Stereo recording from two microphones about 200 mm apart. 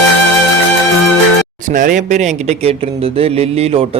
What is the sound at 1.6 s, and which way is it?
Speech, 40° right (ahead or behind).